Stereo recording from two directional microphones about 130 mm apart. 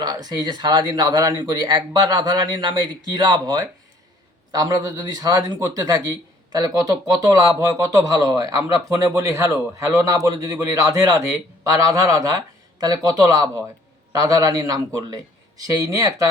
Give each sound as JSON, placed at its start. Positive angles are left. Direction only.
{"t": 0.0, "sound": "speech", "side_deg": -30}